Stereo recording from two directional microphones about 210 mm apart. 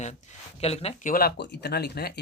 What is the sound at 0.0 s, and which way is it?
Speech, 35° left (ahead or behind).